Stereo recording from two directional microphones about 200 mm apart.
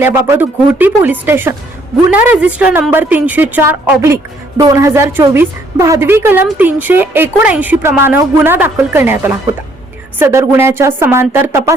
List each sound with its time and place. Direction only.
0.0 s a woman's voice: 10° right (ahead or behind)